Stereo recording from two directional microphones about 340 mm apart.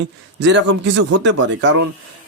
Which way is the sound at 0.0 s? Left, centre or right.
Right.